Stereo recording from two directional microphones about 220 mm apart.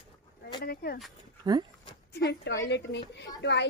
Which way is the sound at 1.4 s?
20° right (ahead or behind).